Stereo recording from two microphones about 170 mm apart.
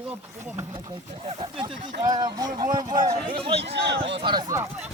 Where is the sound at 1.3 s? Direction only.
35° right (ahead or behind).